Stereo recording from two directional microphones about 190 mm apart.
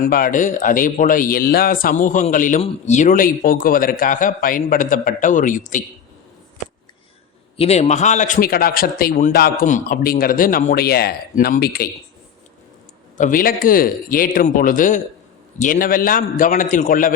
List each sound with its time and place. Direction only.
0.0 s a man's voice: 50° left (ahead or behind)
7.5 s a man's voice: 30° left (ahead or behind); by 11.9 s 50° left (ahead or behind)
13.1 s a man's voice: 45° left (ahead or behind)